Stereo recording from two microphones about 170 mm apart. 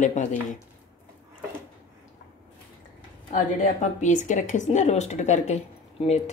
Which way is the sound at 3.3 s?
45° left (ahead or behind).